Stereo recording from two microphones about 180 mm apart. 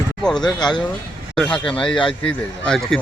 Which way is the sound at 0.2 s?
5° left (ahead or behind).